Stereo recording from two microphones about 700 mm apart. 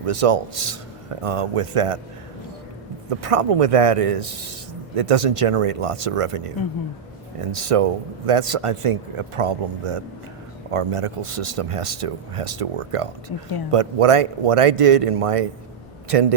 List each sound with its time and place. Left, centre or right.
0.0 s speech: right
3.1 s speech: right